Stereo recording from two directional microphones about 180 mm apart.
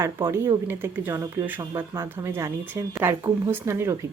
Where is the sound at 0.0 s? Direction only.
15° right (ahead or behind).